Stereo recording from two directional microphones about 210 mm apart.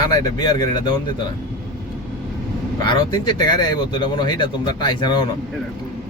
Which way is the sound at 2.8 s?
20° left (ahead or behind).